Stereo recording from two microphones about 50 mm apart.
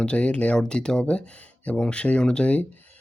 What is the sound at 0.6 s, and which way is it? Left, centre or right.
Speech, centre.